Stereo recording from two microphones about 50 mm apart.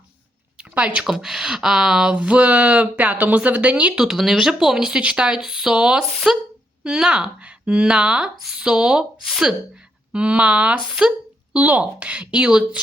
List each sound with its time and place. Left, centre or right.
0.7 s speech: right
1.0 s speech: centre
2.1 s a woman's voice: right
3.9 s speech: centre
10.1 s speech: right